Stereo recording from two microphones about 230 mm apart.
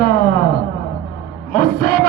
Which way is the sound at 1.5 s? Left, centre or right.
Left.